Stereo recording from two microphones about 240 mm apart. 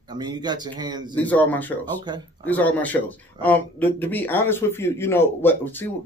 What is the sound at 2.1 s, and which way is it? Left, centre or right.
Speech, centre.